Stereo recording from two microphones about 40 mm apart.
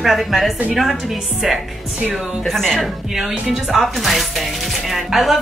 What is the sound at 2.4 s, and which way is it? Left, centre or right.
Speech, centre.